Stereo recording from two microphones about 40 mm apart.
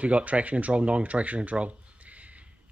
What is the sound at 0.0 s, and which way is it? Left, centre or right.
Speech, right.